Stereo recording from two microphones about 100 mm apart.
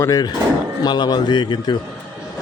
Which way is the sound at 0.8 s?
45° left (ahead or behind).